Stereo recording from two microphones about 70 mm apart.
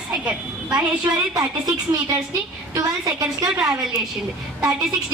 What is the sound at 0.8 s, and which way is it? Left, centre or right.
A woman's voice, right.